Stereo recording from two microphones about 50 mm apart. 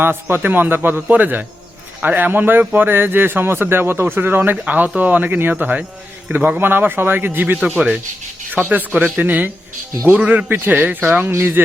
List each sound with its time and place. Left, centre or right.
0.0 s a man's voice: right
4.5 s a man's voice: right